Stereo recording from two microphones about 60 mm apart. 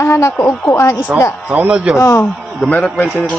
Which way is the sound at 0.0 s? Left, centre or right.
Left.